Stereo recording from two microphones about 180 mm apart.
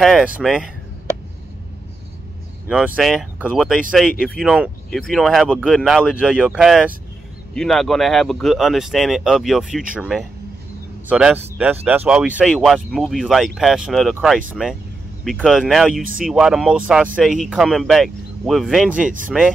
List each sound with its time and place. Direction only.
0.0 s speech: centre (ahead or behind)
2.7 s speech: centre (ahead or behind)
16.0 s speech: 50° right (ahead or behind)
16.3 s speech: centre (ahead or behind)